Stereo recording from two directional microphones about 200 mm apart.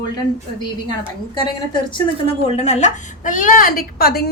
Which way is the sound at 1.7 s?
25° left (ahead or behind).